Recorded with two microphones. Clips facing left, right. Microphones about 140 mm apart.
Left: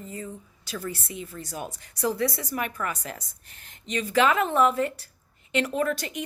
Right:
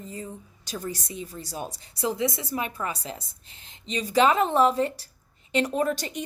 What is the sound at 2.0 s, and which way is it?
A woman's voice, 20° right (ahead or behind).